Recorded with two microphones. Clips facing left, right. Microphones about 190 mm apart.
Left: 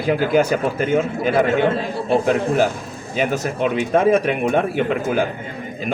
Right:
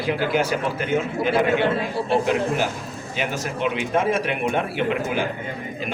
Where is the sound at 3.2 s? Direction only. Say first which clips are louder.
Left 6 dB; 40° left (ahead or behind).